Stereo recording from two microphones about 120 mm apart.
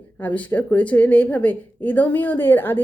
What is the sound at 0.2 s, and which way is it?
A woman's voice, 15° left (ahead or behind).